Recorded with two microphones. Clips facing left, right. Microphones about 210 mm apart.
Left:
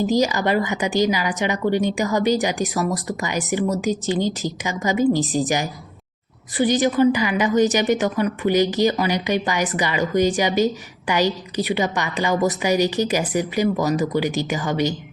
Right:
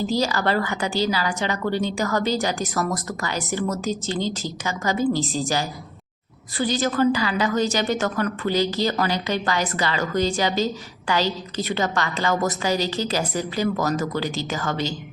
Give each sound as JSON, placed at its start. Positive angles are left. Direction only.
{"t": 0.0, "sound": "a woman's voice", "side_deg": 15}